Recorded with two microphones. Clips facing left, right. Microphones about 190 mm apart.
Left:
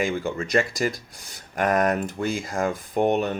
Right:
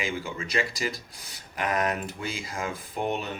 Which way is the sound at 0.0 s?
50° left (ahead or behind).